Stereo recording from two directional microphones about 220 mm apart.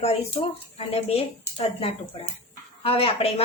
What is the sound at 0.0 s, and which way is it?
A woman's voice, 25° left (ahead or behind).